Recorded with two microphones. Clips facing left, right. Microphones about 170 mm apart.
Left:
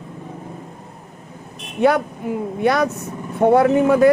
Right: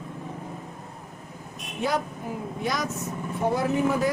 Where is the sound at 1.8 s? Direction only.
65° left (ahead or behind).